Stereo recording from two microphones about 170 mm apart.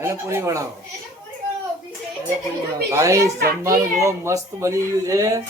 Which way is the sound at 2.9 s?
20° right (ahead or behind).